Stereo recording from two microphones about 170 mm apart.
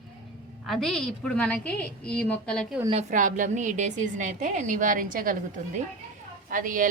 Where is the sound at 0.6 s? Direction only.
Centre (ahead or behind).